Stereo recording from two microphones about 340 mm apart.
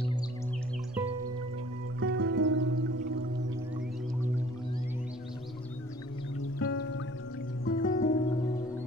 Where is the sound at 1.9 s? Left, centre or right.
Right.